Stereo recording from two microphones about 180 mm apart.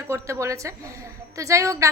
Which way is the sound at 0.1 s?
15° right (ahead or behind).